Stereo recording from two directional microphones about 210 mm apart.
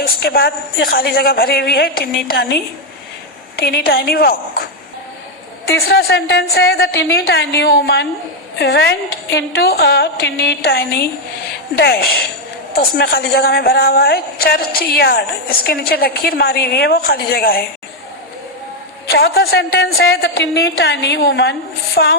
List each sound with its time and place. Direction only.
0.0 s a woman's voice: 45° left (ahead or behind)
3.6 s a woman's voice: 45° left (ahead or behind)
5.6 s a woman's voice: 50° left (ahead or behind)
19.1 s a woman's voice: 50° left (ahead or behind)